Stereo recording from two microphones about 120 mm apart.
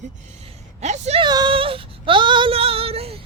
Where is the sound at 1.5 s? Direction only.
50° right (ahead or behind).